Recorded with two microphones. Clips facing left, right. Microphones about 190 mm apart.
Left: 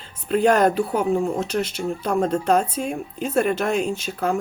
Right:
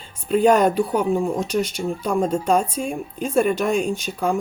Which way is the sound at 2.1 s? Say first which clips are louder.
Even; 10° right (ahead or behind).